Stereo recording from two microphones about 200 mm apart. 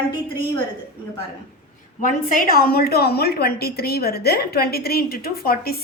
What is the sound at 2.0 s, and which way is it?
A woman's voice, 40° left (ahead or behind).